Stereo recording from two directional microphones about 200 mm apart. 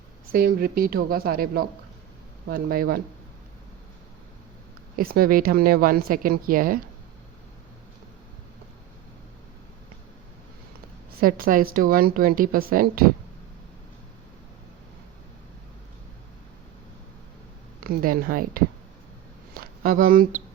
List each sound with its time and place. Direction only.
0.3 s a woman's voice: 45° right (ahead or behind)
4.9 s a woman's voice: 45° right (ahead or behind)
11.2 s a woman's voice: 45° right (ahead or behind)
17.8 s a woman's voice: 45° right (ahead or behind)